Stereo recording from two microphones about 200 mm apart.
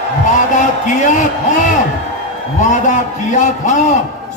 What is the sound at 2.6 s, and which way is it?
A man's voice, 40° left (ahead or behind).